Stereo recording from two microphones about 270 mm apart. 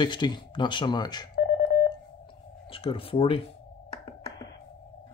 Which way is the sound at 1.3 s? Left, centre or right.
Left.